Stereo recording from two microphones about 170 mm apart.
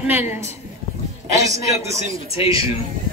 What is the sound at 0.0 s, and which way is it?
A man's voice, 10° right (ahead or behind).